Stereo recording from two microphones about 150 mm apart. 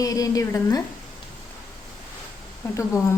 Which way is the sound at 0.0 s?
20° left (ahead or behind).